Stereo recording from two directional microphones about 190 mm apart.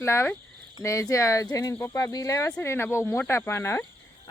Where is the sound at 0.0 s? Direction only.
15° left (ahead or behind).